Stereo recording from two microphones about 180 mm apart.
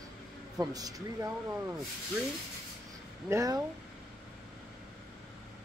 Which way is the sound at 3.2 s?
15° right (ahead or behind).